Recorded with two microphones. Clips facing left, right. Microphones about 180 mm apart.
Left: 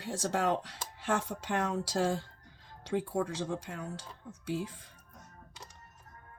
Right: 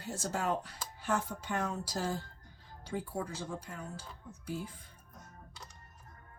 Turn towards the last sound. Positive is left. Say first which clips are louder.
# left 5 dB
turn(degrees=90)